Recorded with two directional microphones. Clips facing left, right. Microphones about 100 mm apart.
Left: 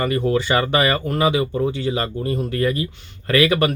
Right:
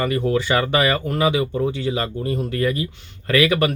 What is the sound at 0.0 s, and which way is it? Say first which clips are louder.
Speech: left 1 dB; 35° left (ahead or behind).